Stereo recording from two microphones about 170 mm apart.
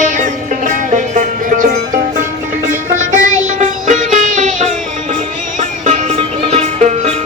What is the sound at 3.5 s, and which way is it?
Music, 45° right (ahead or behind).